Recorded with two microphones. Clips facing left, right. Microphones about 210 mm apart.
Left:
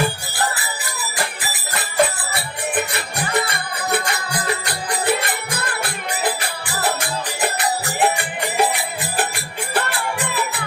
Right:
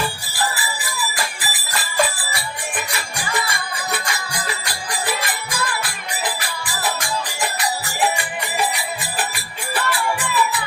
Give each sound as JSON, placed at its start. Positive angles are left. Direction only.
{"t": 0.0, "sound": "music", "side_deg": 60}
{"t": 8.5, "sound": "music", "side_deg": 60}